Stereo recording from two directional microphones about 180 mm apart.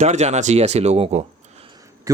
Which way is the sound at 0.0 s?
40° right (ahead or behind).